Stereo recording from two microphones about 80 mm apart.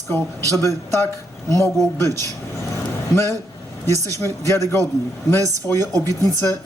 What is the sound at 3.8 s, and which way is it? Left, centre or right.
A woman's voice, left.